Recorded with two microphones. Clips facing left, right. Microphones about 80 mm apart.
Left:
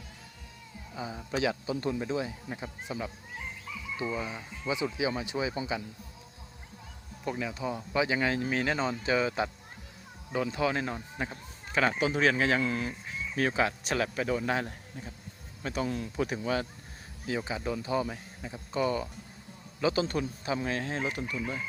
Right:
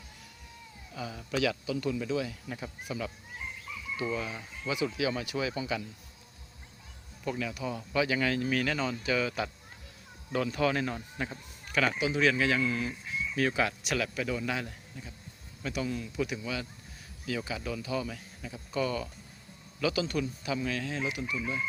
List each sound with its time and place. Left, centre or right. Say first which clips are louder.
0.9 s speech: even; left
7.3 s speech: left 1 dB; left
11.9 s speech: left 1 dB; left
13.5 s chicken: left 1 dB; left
17.2 s speech: left 2 dB; left
19.8 s chicken: left 2 dB; left